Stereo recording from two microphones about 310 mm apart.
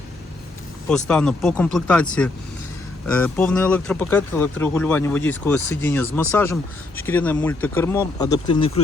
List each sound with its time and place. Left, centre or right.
0.9 s speech: centre
3.2 s speech: centre